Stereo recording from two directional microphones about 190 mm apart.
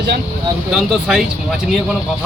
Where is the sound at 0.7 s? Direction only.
5° right (ahead or behind).